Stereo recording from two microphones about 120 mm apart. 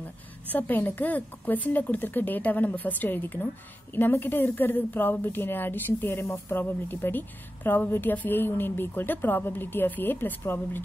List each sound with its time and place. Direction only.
0.5 s a woman's voice: 15° left (ahead or behind)